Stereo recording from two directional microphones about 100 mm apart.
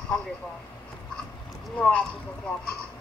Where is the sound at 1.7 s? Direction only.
10° left (ahead or behind).